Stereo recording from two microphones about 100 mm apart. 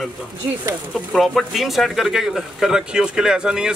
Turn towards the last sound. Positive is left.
turn(degrees=-5)  # may be behind; listen again after turning